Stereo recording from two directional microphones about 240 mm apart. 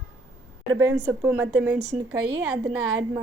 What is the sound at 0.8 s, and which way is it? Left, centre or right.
A woman's voice, centre.